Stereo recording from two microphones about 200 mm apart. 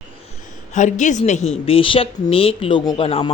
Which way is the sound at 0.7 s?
35° left (ahead or behind).